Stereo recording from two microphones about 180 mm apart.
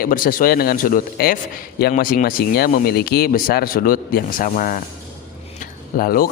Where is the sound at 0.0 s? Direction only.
50° left (ahead or behind).